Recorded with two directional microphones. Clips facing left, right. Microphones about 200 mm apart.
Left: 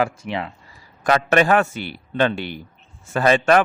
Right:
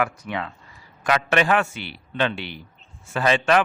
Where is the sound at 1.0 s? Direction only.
40° left (ahead or behind).